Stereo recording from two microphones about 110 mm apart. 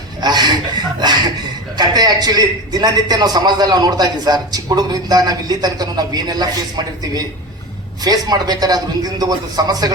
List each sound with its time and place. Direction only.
0.2 s a man's voice: 40° right (ahead or behind)
1.7 s a man's voice: 40° right (ahead or behind)